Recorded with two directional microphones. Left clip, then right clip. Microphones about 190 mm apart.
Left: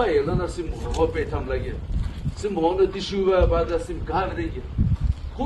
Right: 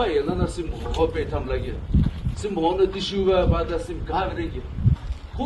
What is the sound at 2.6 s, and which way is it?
A man's voice, 25° right (ahead or behind).